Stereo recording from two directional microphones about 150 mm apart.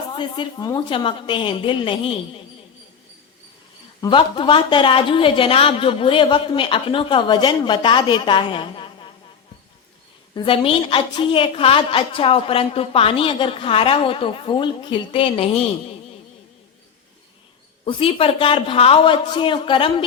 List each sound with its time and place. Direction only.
0.1 s a woman's voice: 30° left (ahead or behind)
4.0 s a woman's voice: 35° left (ahead or behind)
10.3 s a woman's voice: 35° left (ahead or behind)
17.8 s a woman's voice: 40° left (ahead or behind)